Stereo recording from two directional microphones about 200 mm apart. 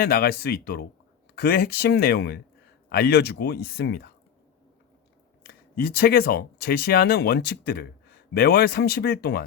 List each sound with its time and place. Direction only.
0.0 s speech: 50° left (ahead or behind)
5.4 s speech: 50° left (ahead or behind)